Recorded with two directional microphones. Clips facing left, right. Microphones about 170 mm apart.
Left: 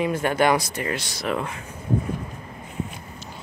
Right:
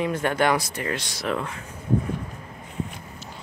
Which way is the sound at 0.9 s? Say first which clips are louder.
Left 1 dB; centre (ahead or behind).